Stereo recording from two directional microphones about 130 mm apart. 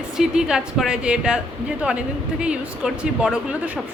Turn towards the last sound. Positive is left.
turn(degrees=-10)  # may be behind; listen again after turning